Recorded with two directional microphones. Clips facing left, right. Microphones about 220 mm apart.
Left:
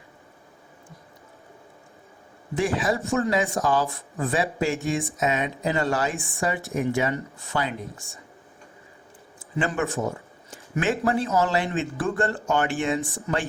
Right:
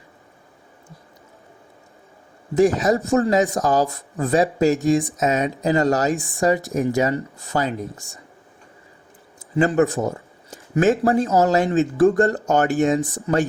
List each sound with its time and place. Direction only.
2.6 s speech: 40° right (ahead or behind)
9.6 s speech: 35° right (ahead or behind)